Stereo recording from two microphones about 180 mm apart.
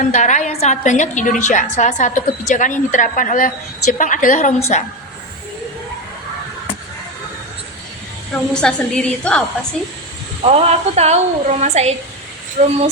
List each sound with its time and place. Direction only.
0.0 s a woman's voice: 40° left (ahead or behind)
8.3 s a woman's voice: 5° left (ahead or behind)
10.4 s a woman's voice: 35° right (ahead or behind)
12.6 s a sound: 45° right (ahead or behind)